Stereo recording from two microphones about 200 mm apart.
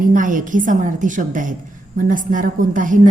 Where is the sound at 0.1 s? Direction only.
40° right (ahead or behind).